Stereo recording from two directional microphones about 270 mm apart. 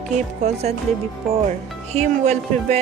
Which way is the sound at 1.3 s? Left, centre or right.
Right.